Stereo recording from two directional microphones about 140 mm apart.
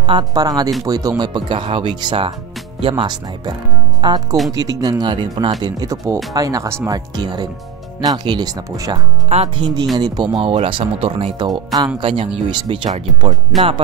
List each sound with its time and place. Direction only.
0.0 s speech: 35° right (ahead or behind)
9.3 s speech: 50° right (ahead or behind)
9.9 s speech: 30° right (ahead or behind)
12.0 s speech: 40° right (ahead or behind)
13.5 s speech: centre (ahead or behind)